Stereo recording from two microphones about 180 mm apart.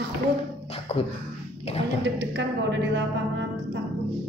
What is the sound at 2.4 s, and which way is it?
Speech, 80° right.